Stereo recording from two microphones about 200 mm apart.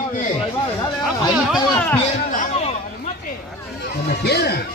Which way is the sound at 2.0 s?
35° left (ahead or behind).